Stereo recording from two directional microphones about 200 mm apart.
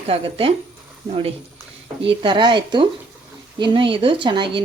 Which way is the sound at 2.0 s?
25° right (ahead or behind).